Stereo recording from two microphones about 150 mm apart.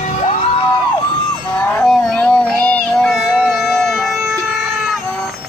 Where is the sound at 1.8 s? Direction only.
5° left (ahead or behind).